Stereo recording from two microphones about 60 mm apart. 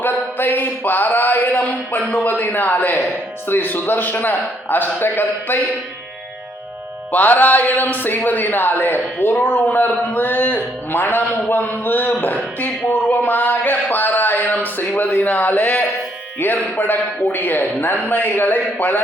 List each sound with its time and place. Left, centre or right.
0.0 s a sound: left
2.1 s a man's voice: left
7.1 s a man's voice: left